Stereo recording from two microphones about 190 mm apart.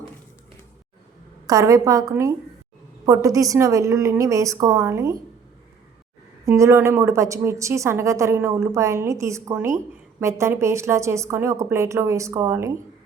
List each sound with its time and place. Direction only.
1.5 s a woman's voice: 20° right (ahead or behind)
6.4 s a woman's voice: 15° right (ahead or behind)